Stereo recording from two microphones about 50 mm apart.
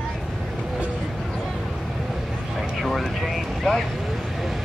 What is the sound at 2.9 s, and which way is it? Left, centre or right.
Vehicle, centre.